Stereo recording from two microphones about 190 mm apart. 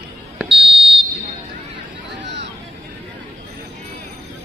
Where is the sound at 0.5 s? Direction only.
30° right (ahead or behind).